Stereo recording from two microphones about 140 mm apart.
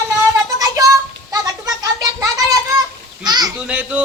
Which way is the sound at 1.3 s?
25° right (ahead or behind).